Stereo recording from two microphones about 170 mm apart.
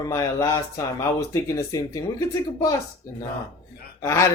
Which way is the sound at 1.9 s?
20° left (ahead or behind).